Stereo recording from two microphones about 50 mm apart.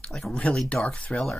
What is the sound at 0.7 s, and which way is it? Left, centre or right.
Speech, centre.